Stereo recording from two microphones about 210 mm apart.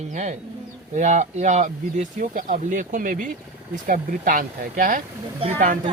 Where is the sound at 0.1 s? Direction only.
35° right (ahead or behind).